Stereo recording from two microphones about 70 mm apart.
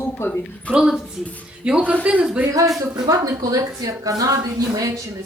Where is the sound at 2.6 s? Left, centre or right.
Right.